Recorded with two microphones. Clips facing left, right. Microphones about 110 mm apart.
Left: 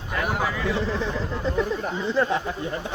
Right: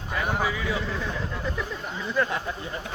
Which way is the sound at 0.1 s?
Centre (ahead or behind).